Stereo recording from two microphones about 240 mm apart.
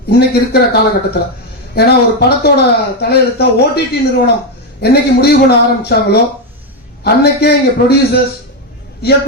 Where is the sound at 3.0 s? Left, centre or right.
Left.